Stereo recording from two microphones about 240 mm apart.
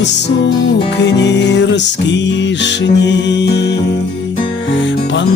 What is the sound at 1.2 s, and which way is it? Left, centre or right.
Music, left.